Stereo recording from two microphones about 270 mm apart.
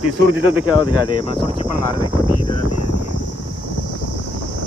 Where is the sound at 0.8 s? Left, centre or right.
Centre.